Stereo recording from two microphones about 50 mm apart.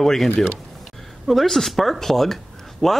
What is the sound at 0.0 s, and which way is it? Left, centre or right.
Speech, centre.